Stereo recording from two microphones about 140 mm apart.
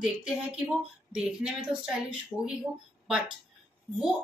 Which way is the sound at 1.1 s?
5° right (ahead or behind).